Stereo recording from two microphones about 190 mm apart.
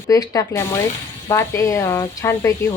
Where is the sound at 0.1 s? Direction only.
15° left (ahead or behind).